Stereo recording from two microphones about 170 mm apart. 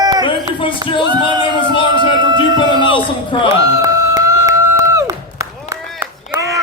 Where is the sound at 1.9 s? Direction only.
25° right (ahead or behind).